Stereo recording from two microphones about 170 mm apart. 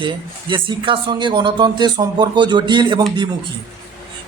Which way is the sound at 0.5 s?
30° right (ahead or behind).